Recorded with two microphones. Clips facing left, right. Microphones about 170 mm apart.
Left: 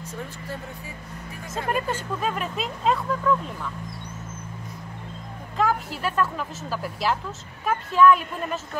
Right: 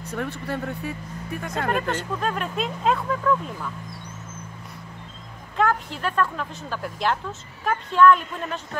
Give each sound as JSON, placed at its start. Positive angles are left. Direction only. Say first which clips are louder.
{"t": 0.0, "sound": "speech", "louder": "right 6 dB", "side_deg": -65}
{"t": 1.7, "sound": "speech", "louder": "even", "side_deg": 5}
{"t": 5.6, "sound": "speech", "louder": "right 1 dB", "side_deg": 5}